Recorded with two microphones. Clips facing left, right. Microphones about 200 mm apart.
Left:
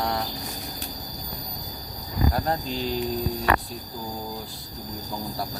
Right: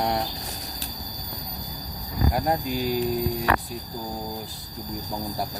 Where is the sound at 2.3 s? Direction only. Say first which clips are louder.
Right 2 dB; 15° right (ahead or behind).